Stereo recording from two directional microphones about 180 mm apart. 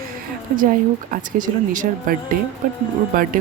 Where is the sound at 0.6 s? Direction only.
50° right (ahead or behind).